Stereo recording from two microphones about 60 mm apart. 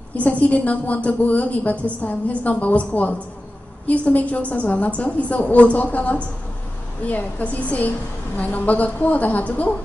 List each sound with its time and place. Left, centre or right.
0.1 s a woman's voice: left